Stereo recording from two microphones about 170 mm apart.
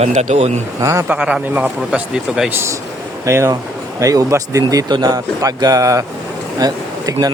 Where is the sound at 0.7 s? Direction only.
20° right (ahead or behind).